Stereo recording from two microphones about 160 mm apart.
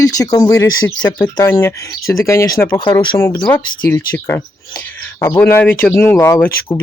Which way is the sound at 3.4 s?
10° left (ahead or behind).